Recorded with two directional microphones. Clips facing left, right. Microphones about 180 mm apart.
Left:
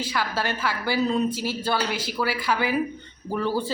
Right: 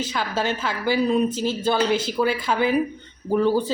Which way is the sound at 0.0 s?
20° right (ahead or behind).